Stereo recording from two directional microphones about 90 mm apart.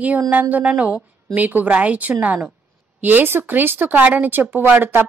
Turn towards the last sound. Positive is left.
turn(degrees=-25)  # may be behind; listen again after turning